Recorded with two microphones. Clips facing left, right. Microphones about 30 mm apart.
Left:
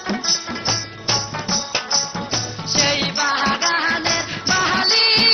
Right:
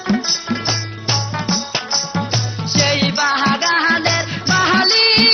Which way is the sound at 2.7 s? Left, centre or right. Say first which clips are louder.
Right 3 dB; centre.